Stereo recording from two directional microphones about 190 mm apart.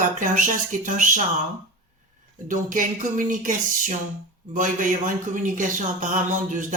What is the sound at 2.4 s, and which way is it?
Speech, 45° right (ahead or behind).